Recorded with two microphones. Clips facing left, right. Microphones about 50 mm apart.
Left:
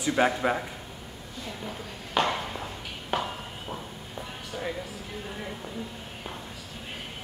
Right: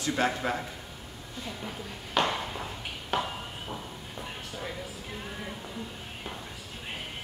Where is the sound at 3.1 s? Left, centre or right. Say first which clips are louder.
Left 1 dB; centre.